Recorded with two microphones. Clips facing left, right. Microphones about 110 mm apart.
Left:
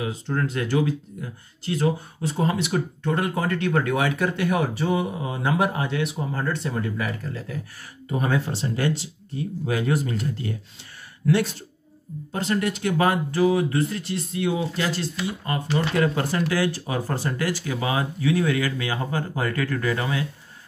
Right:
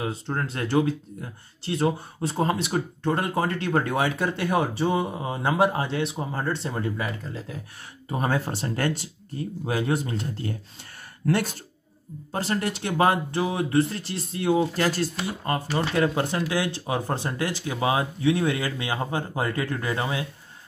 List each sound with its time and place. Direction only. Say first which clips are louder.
0.0 s speech: left 2 dB; 30° right (ahead or behind)
8.5 s speech: left 2 dB; 50° right (ahead or behind)
9.7 s speech: left 1 dB; 30° right (ahead or behind)
11.2 s speech: left 3 dB; 45° right (ahead or behind)
12.3 s speech: left 2 dB; 35° right (ahead or behind)
15.1 s speech: even; 35° right (ahead or behind)
16.2 s speech: left 2 dB; 20° right (ahead or behind)